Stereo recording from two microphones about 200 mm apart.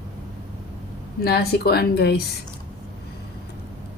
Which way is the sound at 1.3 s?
50° left (ahead or behind).